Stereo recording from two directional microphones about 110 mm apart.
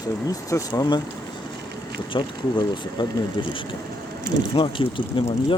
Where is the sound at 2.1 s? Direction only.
45° left (ahead or behind).